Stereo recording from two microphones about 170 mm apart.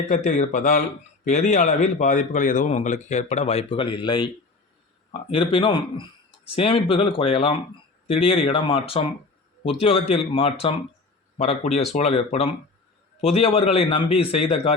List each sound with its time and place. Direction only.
0.1 s speech: 45° left (ahead or behind); by 4.3 s 30° left (ahead or behind)
5.3 s a man's voice: 30° left (ahead or behind)